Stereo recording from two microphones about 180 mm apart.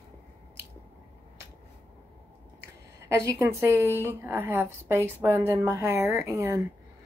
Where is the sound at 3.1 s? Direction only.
15° right (ahead or behind).